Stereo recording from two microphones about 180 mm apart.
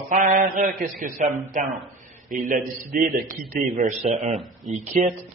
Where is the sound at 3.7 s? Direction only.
40° right (ahead or behind).